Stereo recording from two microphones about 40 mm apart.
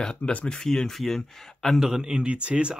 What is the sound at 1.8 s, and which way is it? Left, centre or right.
Speech, centre.